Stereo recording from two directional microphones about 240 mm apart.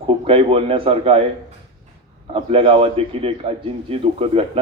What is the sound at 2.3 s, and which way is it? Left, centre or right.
A man's voice, right.